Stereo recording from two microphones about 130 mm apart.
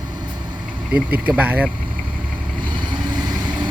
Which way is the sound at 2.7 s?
35° right (ahead or behind).